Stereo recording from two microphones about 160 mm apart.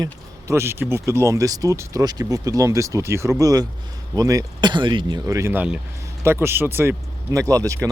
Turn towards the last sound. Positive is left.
turn(degrees=-20)  # may be behind; listen again after turning